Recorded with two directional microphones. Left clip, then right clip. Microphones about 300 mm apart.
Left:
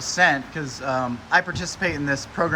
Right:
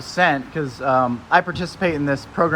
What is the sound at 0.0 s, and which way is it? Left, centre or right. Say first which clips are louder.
Speech: right 1 dB; centre.